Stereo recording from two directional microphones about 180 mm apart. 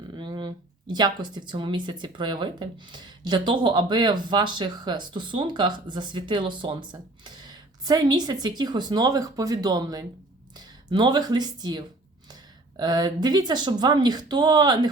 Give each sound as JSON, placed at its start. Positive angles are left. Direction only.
{"t": 0.1, "sound": "speech", "side_deg": -25}